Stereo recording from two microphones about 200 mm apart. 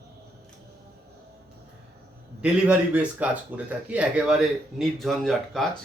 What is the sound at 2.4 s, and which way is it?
Speech, 5° right (ahead or behind).